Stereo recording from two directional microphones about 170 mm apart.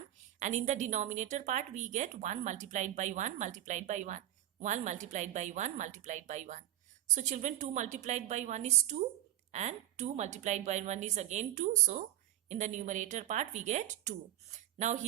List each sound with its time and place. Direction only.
0.3 s a woman's voice: 45° right (ahead or behind)